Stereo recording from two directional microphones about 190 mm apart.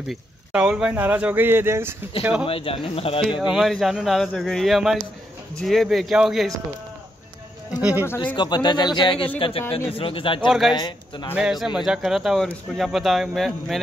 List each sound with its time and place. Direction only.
0.1 s speech: 5° right (ahead or behind)
2.4 s speech: 30° left (ahead or behind)
3.3 s speech: 5° right (ahead or behind)
7.8 s speech: 10° right (ahead or behind)
8.4 s speech: 25° left (ahead or behind)
11.3 s speech: 5° right (ahead or behind)